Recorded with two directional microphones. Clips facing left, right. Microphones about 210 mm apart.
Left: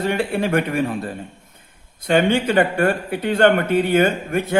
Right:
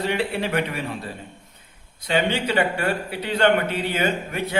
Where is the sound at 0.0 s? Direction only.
50° left (ahead or behind).